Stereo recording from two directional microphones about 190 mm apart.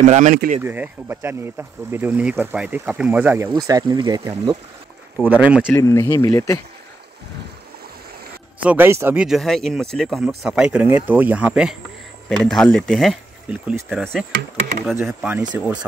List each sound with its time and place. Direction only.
0.0 s speech: 40° right (ahead or behind)
0.6 s speech: 10° right (ahead or behind)
3.5 s speech: 20° right (ahead or behind)
5.1 s speech: 10° right (ahead or behind)
5.7 s speech: 15° left (ahead or behind)
8.5 s speech: 10° right (ahead or behind)
15.5 s speech: 15° right (ahead or behind)